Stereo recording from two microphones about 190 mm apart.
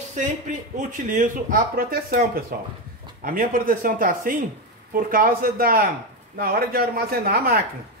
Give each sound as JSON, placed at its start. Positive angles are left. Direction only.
{"t": 0.7, "sound": "speech", "side_deg": -45}